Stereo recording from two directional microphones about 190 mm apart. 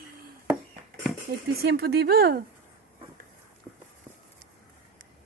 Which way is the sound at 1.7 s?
55° right (ahead or behind).